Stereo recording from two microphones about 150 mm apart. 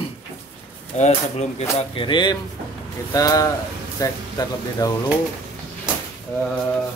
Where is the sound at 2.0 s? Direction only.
30° left (ahead or behind).